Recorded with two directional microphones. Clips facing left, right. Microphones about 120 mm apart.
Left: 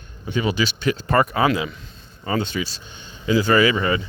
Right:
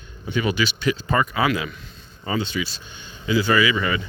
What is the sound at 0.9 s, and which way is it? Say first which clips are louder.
Speech: left 3 dB; 55° left (ahead or behind).